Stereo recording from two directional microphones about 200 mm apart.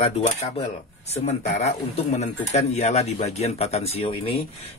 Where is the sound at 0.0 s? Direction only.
30° left (ahead or behind).